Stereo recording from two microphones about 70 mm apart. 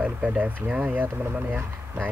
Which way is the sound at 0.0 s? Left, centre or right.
Centre.